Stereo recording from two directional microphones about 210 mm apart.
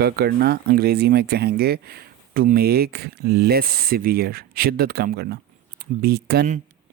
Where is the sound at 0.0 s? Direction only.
50° right (ahead or behind).